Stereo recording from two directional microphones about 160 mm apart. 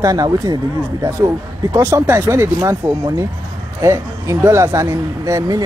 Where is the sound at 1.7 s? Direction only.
20° right (ahead or behind).